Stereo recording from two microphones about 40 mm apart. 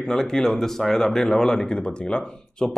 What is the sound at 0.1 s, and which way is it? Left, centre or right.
Speech, centre.